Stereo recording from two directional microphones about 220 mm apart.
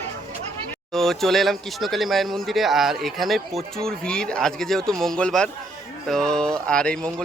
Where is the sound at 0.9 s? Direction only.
Centre (ahead or behind).